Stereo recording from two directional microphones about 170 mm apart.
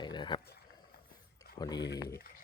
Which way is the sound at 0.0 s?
25° left (ahead or behind).